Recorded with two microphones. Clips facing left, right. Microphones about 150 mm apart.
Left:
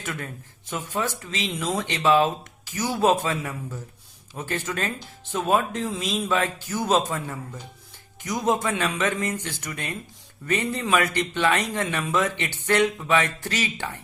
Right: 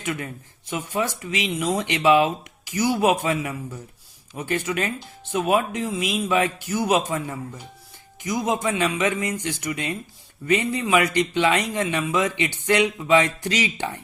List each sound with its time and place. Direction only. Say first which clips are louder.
0.0 s speech: right 4 dB; 15° right (ahead or behind)